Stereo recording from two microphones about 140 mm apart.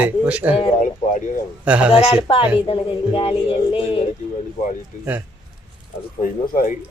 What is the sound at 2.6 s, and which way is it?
Speech, 45° left (ahead or behind).